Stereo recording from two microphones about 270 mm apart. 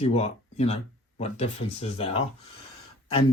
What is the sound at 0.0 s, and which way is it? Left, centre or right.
Speech, left.